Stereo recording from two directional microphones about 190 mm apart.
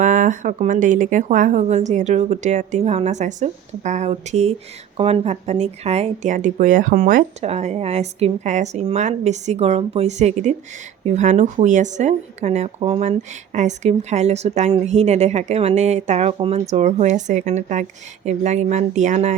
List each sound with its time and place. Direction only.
0.0 s speech: 45° right (ahead or behind)